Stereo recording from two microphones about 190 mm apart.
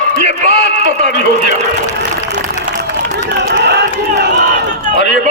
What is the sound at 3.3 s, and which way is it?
Crowd, 65° right (ahead or behind).